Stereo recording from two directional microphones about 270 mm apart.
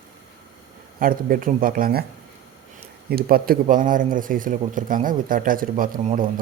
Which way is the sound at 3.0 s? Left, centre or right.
Right.